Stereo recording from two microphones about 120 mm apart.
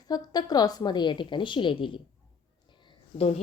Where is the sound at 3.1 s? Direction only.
60° left (ahead or behind).